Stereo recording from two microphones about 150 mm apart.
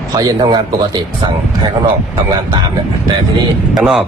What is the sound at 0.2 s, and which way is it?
Speech, 25° right (ahead or behind).